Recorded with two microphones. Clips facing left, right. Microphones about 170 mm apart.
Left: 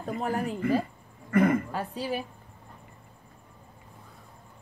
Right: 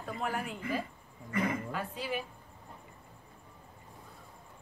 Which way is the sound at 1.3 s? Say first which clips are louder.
Left 10 dB; 55° left (ahead or behind).